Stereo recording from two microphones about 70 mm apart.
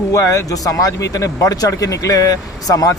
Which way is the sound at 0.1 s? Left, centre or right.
Left.